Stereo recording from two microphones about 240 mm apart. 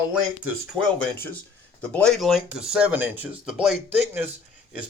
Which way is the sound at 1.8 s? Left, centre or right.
Centre.